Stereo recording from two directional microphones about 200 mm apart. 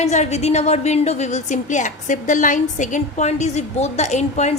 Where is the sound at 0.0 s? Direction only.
35° left (ahead or behind).